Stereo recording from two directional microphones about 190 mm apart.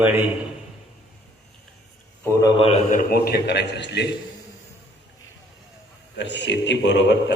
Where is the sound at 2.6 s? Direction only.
35° left (ahead or behind); by 4.0 s 65° left (ahead or behind).